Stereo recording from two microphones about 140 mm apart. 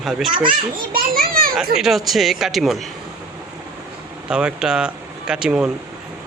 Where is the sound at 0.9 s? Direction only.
90° right.